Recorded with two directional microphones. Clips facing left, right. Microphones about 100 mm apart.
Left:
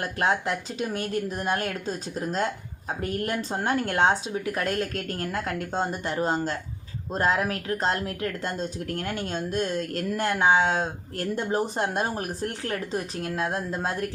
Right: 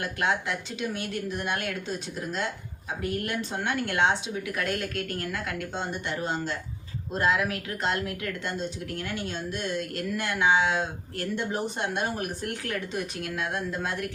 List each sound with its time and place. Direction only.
0.0 s speech: 35° left (ahead or behind)